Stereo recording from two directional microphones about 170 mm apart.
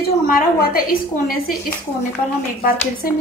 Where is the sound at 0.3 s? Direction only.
60° left (ahead or behind).